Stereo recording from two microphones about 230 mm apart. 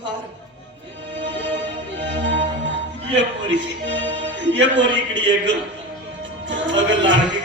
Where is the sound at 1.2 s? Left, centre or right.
Right.